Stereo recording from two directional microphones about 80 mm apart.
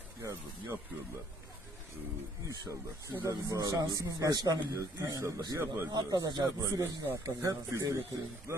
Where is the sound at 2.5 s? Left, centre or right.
Right.